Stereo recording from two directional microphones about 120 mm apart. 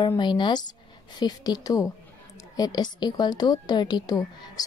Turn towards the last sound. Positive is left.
turn(degrees=30)  # may be behind; listen again after turning